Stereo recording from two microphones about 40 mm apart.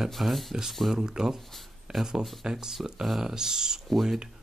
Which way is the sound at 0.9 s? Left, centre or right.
Centre.